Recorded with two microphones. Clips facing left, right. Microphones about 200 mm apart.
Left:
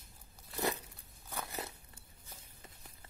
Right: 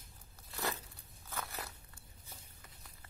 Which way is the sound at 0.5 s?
20° left (ahead or behind).